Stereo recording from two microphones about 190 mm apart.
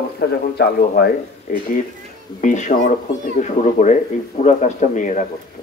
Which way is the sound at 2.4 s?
40° left (ahead or behind).